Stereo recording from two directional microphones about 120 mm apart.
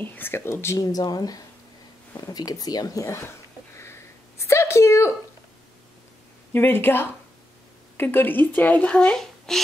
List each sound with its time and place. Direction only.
0.0 s speech: 15° left (ahead or behind)
3.7 s a sound: 20° left (ahead or behind)
6.5 s speech: 20° left (ahead or behind)